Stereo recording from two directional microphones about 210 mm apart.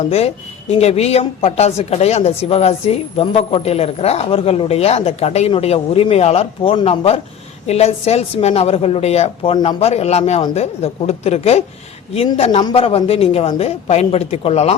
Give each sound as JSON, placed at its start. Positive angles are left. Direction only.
{"t": 0.0, "sound": "speech", "side_deg": 30}